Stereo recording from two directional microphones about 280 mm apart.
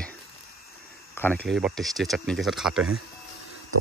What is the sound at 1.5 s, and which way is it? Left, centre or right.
Speech, centre.